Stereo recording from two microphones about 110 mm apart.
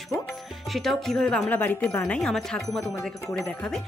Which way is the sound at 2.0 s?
10° left (ahead or behind).